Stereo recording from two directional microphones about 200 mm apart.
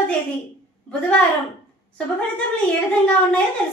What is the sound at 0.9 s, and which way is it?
Speech, 5° left (ahead or behind).